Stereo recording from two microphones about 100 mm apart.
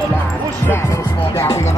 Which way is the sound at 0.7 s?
30° left (ahead or behind).